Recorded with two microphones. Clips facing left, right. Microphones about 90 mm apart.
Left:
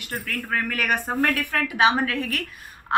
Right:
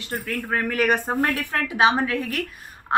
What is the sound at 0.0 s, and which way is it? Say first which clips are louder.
A woman's voice: right 2 dB; 25° right (ahead or behind).